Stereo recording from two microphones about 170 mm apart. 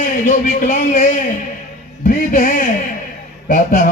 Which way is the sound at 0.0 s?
50° left (ahead or behind).